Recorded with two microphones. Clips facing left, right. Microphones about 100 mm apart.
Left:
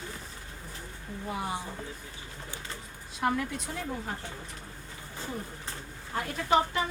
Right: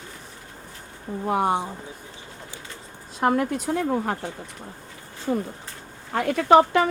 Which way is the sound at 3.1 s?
50° right (ahead or behind).